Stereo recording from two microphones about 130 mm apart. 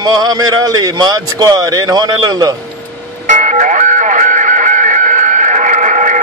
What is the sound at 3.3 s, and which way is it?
Music, 70° right (ahead or behind).